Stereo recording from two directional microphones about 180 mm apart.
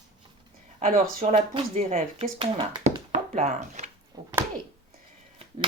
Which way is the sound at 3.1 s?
40° right (ahead or behind).